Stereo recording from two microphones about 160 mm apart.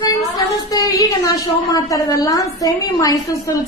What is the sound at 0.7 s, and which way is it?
A woman's voice, 20° left (ahead or behind).